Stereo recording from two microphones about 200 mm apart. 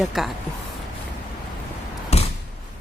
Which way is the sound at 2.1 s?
30° left (ahead or behind).